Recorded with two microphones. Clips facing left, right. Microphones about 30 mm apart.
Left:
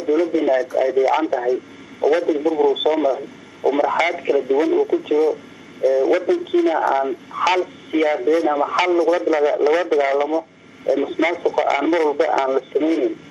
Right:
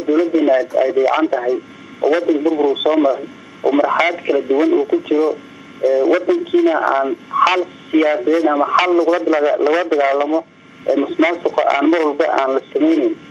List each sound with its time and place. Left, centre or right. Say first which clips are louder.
0.0 s speech: right 3 dB; centre